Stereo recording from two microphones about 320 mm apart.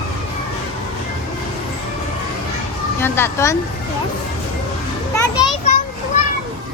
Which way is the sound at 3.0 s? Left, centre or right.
Centre.